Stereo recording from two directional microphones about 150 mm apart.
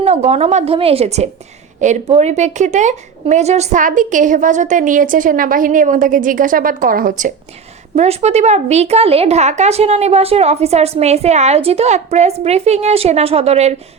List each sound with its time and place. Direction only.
0.0 s a woman's voice: 45° right (ahead or behind); by 7.3 s 65° right (ahead or behind)
7.9 s speech: 45° right (ahead or behind)